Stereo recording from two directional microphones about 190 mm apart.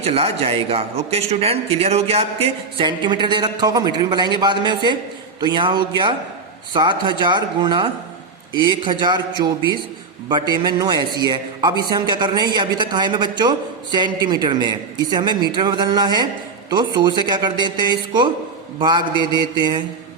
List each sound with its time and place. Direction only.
0.0 s a man's voice: 30° right (ahead or behind)
19.1 s mantra: 25° left (ahead or behind)
19.4 s a man's voice: 20° right (ahead or behind)